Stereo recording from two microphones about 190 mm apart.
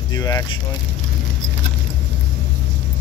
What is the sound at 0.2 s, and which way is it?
Speech, 20° left (ahead or behind).